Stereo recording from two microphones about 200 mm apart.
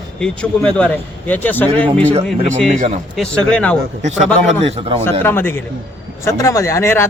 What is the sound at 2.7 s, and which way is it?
Speech, 35° right (ahead or behind).